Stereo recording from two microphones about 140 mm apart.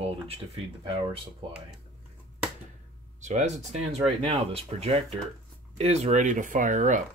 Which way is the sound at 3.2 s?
55° right (ahead or behind).